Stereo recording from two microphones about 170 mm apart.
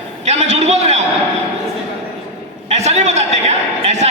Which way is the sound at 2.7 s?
40° right (ahead or behind).